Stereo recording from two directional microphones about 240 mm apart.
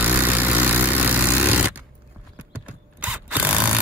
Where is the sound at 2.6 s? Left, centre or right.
Centre.